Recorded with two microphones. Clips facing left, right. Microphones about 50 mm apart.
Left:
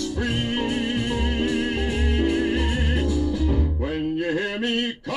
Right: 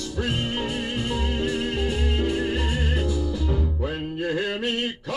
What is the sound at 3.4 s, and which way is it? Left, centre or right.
Music, centre.